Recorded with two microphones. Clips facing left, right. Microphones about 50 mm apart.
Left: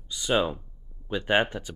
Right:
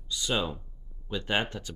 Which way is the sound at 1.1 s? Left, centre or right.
Left.